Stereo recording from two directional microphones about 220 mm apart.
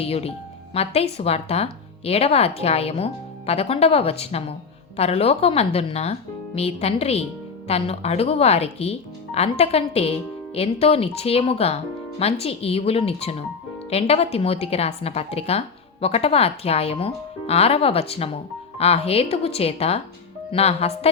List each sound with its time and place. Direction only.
0.0 s a woman's voice: 25° left (ahead or behind)